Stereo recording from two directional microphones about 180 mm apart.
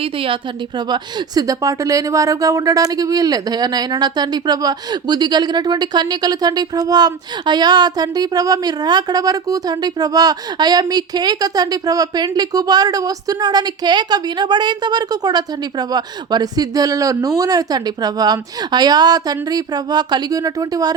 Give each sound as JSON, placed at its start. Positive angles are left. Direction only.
{"t": 0.0, "sound": "speech", "side_deg": -30}